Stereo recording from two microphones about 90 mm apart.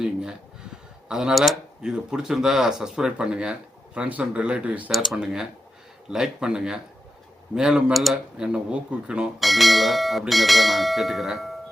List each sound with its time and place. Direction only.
0.0 s speech: 5° right (ahead or behind)
4.9 s speech: centre (ahead or behind)
8.4 s speech: 10° right (ahead or behind)
9.4 s speech: centre (ahead or behind)